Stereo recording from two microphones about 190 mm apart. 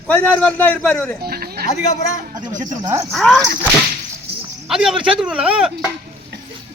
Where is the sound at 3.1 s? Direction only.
Centre (ahead or behind).